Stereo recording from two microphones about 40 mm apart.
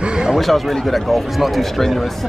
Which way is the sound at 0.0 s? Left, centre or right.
Right.